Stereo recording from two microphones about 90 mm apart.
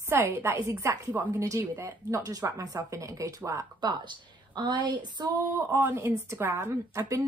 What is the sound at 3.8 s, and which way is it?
A woman's voice, 55° right (ahead or behind).